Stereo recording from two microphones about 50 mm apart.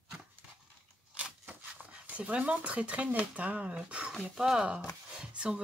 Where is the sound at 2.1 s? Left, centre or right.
Right.